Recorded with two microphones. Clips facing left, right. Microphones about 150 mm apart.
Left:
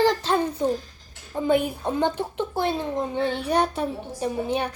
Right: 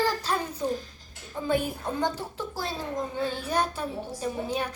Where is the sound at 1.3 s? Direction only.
45° left (ahead or behind).